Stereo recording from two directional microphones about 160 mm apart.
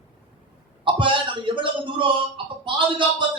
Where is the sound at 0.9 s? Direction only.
30° right (ahead or behind).